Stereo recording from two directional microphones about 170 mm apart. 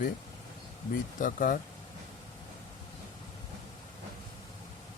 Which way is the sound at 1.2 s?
55° left (ahead or behind).